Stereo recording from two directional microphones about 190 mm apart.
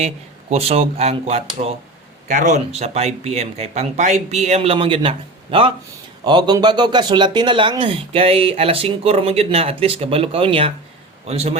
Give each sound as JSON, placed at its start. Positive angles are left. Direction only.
{"t": 0.5, "sound": "speech", "side_deg": -30}